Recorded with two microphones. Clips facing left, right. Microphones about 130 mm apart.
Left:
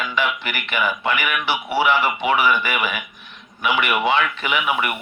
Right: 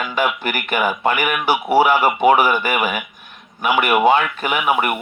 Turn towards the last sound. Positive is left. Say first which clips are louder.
# right 4 dB
turn(degrees=-45)  # may be behind; listen again after turning